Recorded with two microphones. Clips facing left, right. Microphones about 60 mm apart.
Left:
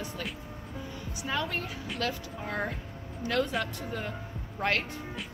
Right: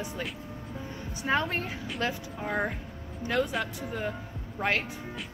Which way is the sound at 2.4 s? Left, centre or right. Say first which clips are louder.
Right 3 dB; centre.